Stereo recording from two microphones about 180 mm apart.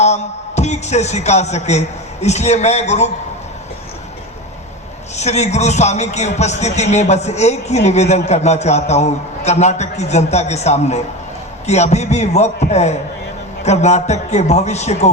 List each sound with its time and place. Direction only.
0.0 s a man's voice: 40° left (ahead or behind)
5.1 s a man's voice: 40° left (ahead or behind)